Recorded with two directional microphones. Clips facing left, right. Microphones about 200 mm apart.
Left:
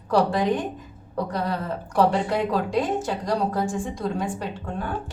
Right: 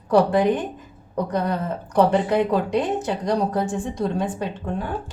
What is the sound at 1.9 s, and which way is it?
Speech, 20° right (ahead or behind).